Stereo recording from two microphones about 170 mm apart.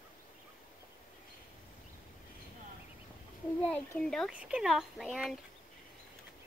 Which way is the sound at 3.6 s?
5° left (ahead or behind).